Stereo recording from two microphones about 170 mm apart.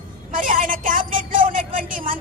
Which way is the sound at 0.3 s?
50° right (ahead or behind).